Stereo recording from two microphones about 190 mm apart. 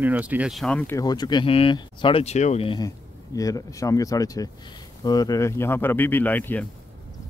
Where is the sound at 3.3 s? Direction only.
20° left (ahead or behind).